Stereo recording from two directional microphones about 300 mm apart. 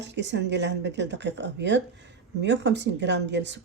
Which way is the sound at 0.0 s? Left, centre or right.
Right.